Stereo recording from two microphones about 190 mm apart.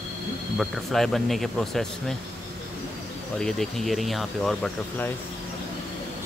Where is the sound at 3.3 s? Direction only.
5° left (ahead or behind).